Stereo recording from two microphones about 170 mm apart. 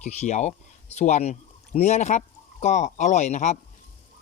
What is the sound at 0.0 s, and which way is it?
Speech, 45° left (ahead or behind).